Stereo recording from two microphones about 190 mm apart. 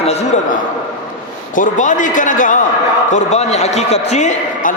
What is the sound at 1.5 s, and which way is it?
A man's voice, 40° left (ahead or behind).